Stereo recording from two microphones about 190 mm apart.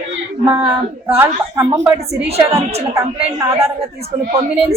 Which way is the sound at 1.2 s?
15° right (ahead or behind).